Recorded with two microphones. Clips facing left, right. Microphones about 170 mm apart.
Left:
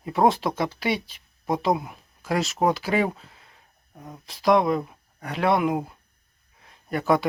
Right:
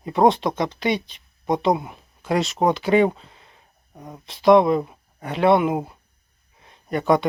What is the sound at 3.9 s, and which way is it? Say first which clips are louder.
Speech: right 3 dB; 20° right (ahead or behind).